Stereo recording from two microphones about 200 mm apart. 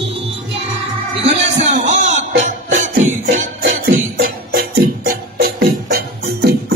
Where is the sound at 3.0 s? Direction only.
35° right (ahead or behind).